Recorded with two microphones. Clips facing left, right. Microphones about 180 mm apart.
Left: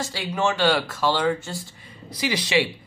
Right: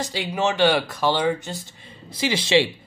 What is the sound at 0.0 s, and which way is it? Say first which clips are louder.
Speech: right 1 dB; 15° right (ahead or behind).